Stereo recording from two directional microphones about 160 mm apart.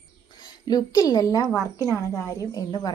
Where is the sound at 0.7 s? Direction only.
25° left (ahead or behind).